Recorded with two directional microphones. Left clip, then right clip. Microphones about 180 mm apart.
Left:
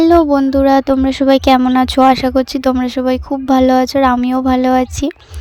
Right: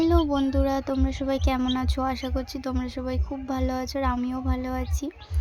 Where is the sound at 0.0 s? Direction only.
45° left (ahead or behind).